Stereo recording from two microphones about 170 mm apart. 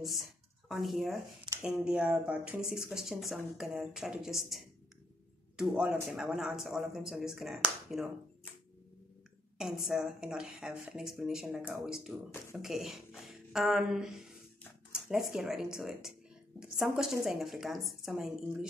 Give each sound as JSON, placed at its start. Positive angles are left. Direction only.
{"t": 0.7, "sound": "speech", "side_deg": 0}
{"t": 5.6, "sound": "speech", "side_deg": -5}
{"t": 9.6, "sound": "speech", "side_deg": -5}